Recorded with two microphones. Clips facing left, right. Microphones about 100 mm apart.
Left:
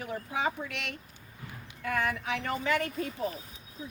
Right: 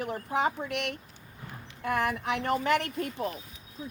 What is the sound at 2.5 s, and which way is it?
Speech, 65° right (ahead or behind).